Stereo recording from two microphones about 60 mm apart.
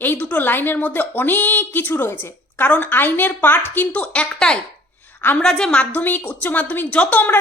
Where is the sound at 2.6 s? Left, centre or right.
Left.